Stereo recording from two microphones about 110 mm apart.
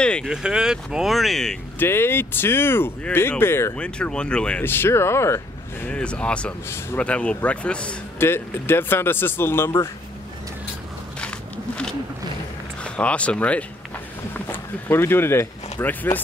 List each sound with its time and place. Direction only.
0.0 s a sound: 10° left (ahead or behind)
0.3 s speech: 5° right (ahead or behind)
1.8 s speech: 20° left (ahead or behind)
3.7 s speech: 10° left (ahead or behind)
4.6 s speech: 20° left (ahead or behind)
5.9 s speech: 10° left (ahead or behind)
8.2 s speech: 20° left (ahead or behind)
11.1 s a sound: 10° left (ahead or behind)
12.8 s speech: 10° left (ahead or behind)